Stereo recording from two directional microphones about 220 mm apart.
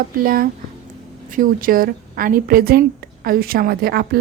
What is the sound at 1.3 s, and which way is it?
A woman's voice, 40° right (ahead or behind).